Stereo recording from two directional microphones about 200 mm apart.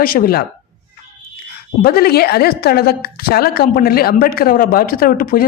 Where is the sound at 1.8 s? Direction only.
50° left (ahead or behind).